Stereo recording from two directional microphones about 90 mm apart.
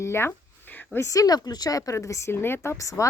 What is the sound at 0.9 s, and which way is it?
Speech, 35° left (ahead or behind).